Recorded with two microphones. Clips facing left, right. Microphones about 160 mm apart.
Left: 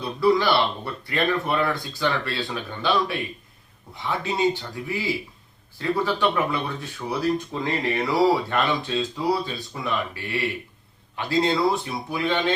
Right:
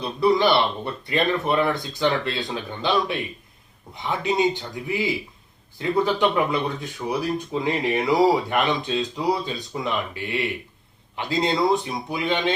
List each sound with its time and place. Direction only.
0.0 s speech: 20° right (ahead or behind)